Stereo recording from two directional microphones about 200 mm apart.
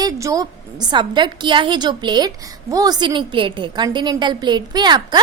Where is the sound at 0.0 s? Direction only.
15° right (ahead or behind).